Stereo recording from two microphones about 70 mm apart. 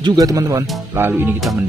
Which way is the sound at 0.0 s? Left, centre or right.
Right.